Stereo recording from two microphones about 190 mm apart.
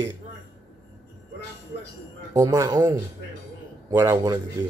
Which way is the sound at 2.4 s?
20° right (ahead or behind).